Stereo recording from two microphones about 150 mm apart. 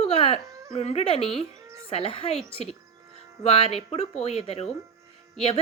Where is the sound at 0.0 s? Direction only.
40° left (ahead or behind).